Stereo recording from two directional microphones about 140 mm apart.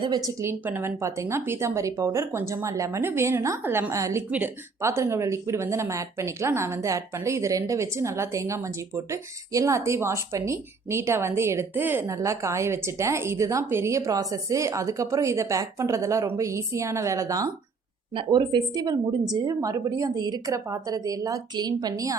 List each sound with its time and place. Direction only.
0.3 s a woman's voice: 15° right (ahead or behind)